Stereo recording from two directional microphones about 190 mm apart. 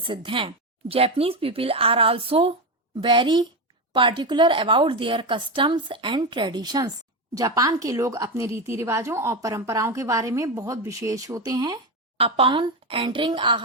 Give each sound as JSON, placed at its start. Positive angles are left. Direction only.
{"t": 0.0, "sound": "a woman's voice", "side_deg": -25}